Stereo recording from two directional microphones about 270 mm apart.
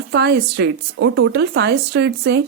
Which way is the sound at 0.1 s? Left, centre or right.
Right.